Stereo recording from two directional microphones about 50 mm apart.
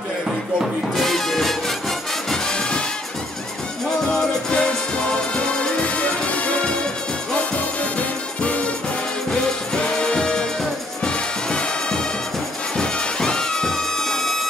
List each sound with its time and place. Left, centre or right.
0.9 s music: centre
4.5 s music: left
8.4 s music: left; by 14.5 s centre